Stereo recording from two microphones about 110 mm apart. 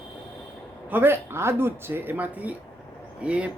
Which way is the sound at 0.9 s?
20° right (ahead or behind).